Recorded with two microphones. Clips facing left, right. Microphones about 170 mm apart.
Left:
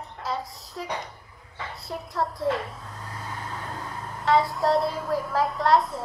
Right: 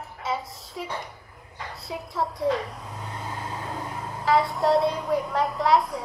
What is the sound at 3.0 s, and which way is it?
Vehicle, 20° right (ahead or behind).